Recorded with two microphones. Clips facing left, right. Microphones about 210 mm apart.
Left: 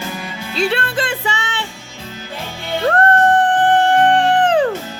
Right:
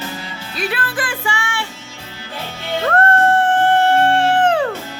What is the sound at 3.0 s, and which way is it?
Music, 20° left (ahead or behind).